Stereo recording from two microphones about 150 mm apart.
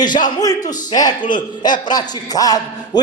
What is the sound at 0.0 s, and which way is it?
A man's voice, 30° left (ahead or behind).